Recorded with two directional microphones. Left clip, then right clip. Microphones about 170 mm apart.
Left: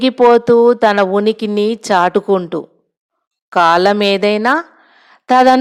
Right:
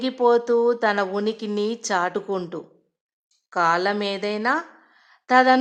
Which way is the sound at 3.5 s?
45° left (ahead or behind).